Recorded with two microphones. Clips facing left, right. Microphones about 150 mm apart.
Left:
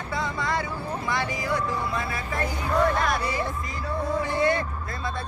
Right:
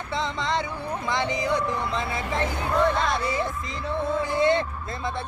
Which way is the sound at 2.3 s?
25° right (ahead or behind).